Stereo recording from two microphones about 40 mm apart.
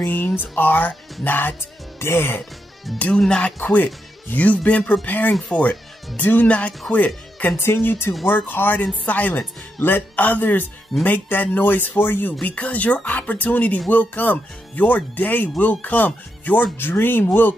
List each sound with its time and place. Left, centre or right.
0.0 s speech: left
2.0 s speech: left
3.3 s speech: left
3.5 s speech: left
5.5 s speech: left
7.5 s speech: left
8.5 s speech: left
9.4 s speech: left
10.1 s speech: left
12.4 s speech: left
16.7 s speech: left